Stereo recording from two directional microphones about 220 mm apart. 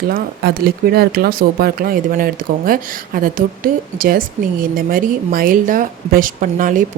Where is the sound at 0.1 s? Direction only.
45° right (ahead or behind).